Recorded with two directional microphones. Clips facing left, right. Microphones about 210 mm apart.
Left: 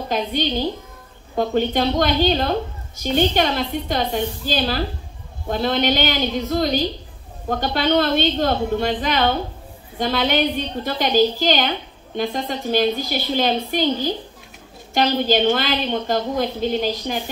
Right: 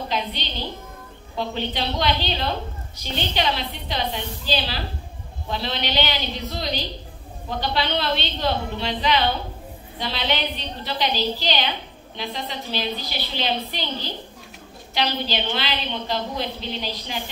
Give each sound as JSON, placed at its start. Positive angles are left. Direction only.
{"t": 0.1, "sound": "a woman's voice", "side_deg": 50}